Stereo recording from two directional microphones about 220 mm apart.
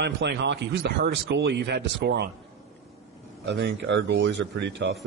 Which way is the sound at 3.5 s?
50° right (ahead or behind).